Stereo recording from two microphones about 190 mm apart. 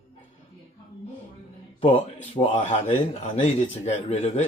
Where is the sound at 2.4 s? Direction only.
40° left (ahead or behind).